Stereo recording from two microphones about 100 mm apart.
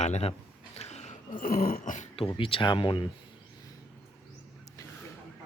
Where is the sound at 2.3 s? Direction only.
60° left (ahead or behind).